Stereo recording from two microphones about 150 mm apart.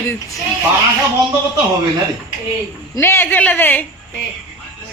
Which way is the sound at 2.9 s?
15° left (ahead or behind).